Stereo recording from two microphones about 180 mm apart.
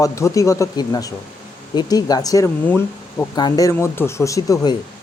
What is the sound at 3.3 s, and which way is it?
Speech, 20° left (ahead or behind).